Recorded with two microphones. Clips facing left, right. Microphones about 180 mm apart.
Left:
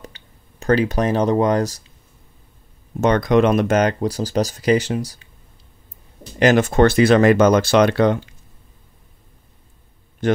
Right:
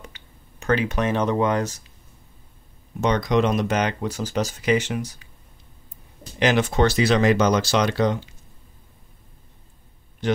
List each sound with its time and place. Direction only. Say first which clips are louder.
0.0 s speech: left 4 dB; 35° left (ahead or behind)
3.0 s speech: left 5 dB; 55° left (ahead or behind); by 5.3 s 30° left (ahead or behind)
6.4 s speech: left 5 dB; 45° left (ahead or behind)
10.2 s speech: left 4 dB; 50° left (ahead or behind)